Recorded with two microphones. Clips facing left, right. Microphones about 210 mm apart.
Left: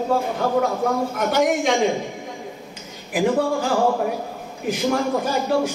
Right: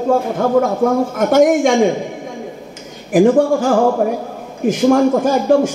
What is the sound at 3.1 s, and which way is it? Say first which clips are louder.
Speech: right 9 dB; 45° right (ahead or behind).